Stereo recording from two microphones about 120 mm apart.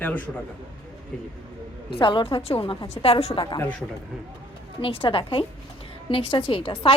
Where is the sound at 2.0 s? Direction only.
45° left (ahead or behind).